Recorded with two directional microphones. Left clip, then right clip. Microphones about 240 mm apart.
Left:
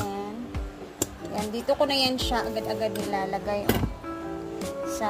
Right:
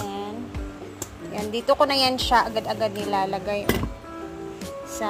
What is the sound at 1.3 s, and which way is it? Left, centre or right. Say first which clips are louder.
Speech: right 5 dB; centre.